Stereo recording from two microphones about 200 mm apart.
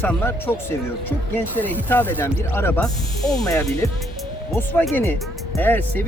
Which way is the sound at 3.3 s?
15° left (ahead or behind).